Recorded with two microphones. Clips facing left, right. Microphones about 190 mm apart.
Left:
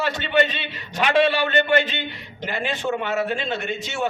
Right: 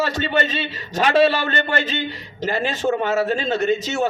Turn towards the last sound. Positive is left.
turn(degrees=-40)  # may be behind; listen again after turning